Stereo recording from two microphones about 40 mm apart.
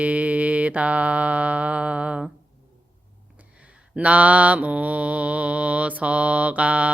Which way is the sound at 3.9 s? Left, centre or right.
Right.